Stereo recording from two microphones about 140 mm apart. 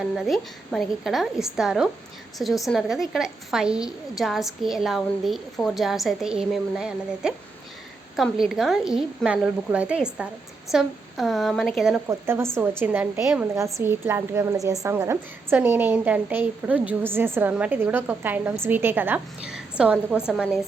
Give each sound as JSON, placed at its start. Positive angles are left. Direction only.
{"t": 0.2, "sound": "a woman's voice", "side_deg": 0}
{"t": 12.0, "sound": "a woman's voice", "side_deg": -15}